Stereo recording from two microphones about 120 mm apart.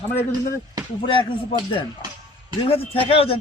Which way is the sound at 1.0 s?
45° left (ahead or behind).